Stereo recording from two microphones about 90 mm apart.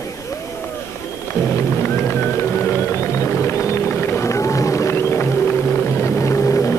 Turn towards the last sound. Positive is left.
turn(degrees=30)  # may be behind; listen again after turning